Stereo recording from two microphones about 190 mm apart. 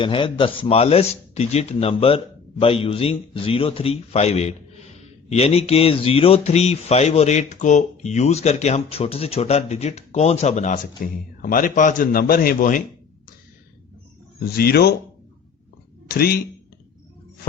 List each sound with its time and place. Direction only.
0.0 s a man's voice: 25° left (ahead or behind); by 12.8 s 45° left (ahead or behind)
14.3 s speech: 55° left (ahead or behind)
16.0 s speech: 55° left (ahead or behind)